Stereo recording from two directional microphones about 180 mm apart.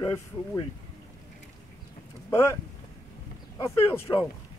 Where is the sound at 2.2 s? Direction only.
15° left (ahead or behind).